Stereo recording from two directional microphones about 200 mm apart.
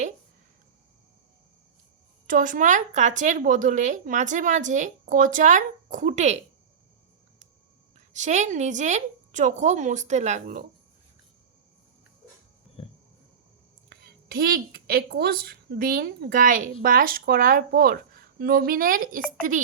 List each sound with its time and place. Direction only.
2.2 s a woman's voice: 40° right (ahead or behind)
8.1 s a woman's voice: 35° right (ahead or behind)
12.8 s wild animals: 30° left (ahead or behind)
13.9 s a woman's voice: 50° right (ahead or behind)